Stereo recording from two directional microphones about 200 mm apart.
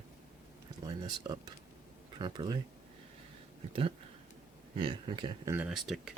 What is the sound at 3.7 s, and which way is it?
Speech, 25° right (ahead or behind).